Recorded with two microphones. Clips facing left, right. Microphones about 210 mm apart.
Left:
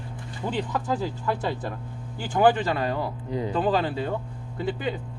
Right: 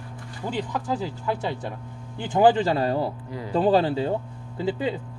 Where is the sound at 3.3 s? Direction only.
20° left (ahead or behind).